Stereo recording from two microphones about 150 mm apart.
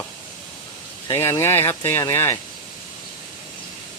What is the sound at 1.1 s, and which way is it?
Speech, 15° left (ahead or behind).